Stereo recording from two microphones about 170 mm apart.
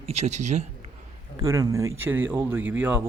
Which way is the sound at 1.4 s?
20° right (ahead or behind).